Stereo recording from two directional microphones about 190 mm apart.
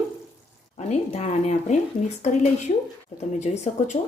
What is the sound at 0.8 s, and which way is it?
Speech, 35° left (ahead or behind).